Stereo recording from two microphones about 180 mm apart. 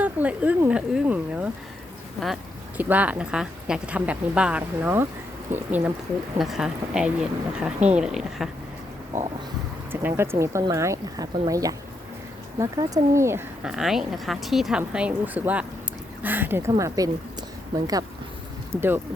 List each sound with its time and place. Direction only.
0.0 s a woman's voice: 10° right (ahead or behind)
9.9 s speech: 10° right (ahead or behind)
13.7 s a woman's voice: 5° right (ahead or behind); by 17.1 s 20° right (ahead or behind)
18.7 s speech: 10° right (ahead or behind)